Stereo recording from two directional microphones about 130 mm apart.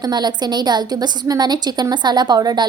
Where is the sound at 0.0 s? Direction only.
35° right (ahead or behind).